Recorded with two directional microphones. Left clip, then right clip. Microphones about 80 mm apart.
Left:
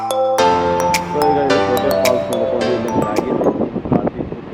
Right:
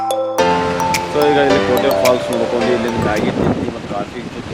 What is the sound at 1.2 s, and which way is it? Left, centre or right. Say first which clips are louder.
Speech: right 3 dB; right.